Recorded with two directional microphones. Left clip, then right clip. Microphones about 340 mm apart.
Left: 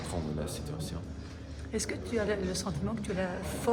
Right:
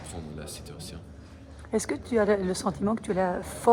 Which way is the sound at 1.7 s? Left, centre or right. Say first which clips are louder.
Right 7 dB; centre.